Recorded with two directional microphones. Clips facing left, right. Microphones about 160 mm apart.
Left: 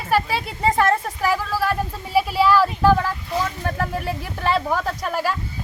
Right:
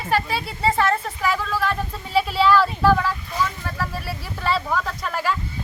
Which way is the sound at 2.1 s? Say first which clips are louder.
Left 1 dB; 10° left (ahead or behind).